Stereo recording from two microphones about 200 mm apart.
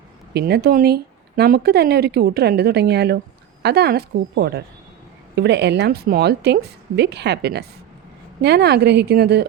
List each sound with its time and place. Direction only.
0.3 s a woman's voice: 55° right (ahead or behind)